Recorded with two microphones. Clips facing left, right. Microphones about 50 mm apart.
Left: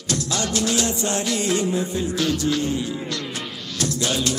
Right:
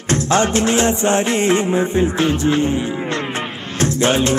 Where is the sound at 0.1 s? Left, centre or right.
Right.